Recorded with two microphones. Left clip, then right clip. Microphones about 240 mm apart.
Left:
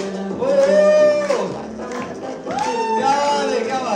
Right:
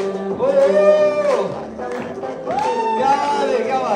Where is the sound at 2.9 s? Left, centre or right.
Left.